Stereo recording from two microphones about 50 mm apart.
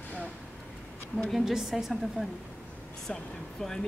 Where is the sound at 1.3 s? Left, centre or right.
Centre.